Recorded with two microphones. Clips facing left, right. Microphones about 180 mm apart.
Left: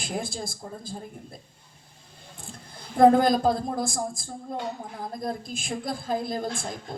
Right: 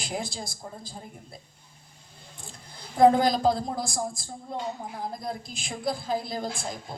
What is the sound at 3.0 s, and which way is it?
A woman's voice, 50° left (ahead or behind).